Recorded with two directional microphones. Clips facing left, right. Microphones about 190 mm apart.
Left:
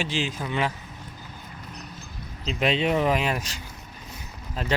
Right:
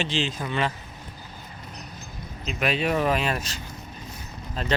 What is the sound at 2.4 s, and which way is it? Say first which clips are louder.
Speech: left 2 dB; 25° left (ahead or behind).